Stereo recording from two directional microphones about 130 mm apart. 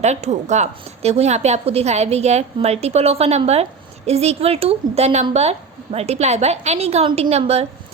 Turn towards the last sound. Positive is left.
turn(degrees=-55)  # may be behind; listen again after turning